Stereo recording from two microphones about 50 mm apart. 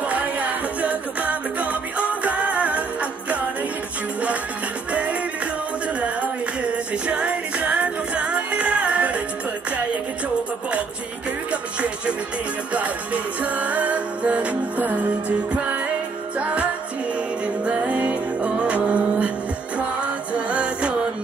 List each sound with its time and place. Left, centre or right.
0.1 s music: right
5.9 s music: right
11.5 s music: right
16.3 s music: right
17.6 s music: right
20.3 s music: right